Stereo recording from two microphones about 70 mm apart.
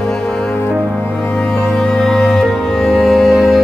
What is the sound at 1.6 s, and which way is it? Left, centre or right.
Music, centre.